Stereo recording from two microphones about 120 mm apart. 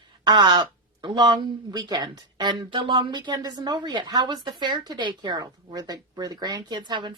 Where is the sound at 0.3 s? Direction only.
35° right (ahead or behind).